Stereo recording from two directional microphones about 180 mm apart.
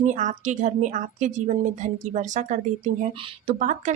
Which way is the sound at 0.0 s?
45° right (ahead or behind).